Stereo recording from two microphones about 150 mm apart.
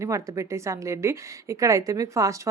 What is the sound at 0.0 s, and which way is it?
A woman's voice, 20° right (ahead or behind).